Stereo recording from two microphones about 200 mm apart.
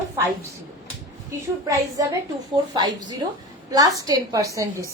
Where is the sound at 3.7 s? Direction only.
20° right (ahead or behind).